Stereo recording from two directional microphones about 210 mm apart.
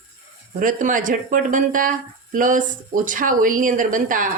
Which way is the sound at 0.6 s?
40° right (ahead or behind).